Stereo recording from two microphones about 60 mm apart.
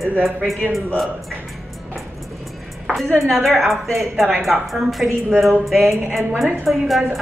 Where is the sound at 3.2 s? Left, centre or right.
Centre.